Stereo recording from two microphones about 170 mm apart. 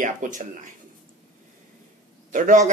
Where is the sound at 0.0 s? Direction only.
50° right (ahead or behind).